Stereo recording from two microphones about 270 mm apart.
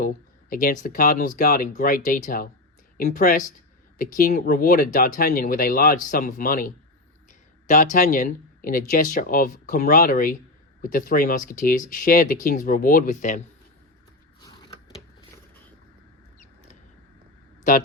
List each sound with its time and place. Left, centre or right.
0.5 s speech: left
7.7 s speech: left
17.6 s speech: left